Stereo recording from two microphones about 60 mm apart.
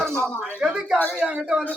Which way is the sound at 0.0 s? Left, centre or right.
Centre.